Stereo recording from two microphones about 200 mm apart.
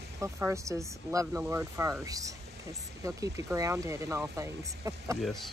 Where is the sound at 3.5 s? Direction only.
15° right (ahead or behind).